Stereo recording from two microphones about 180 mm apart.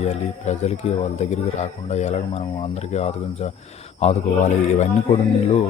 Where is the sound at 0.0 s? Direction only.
40° left (ahead or behind).